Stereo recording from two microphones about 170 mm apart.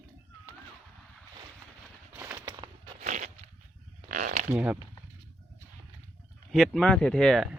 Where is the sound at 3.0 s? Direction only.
45° right (ahead or behind).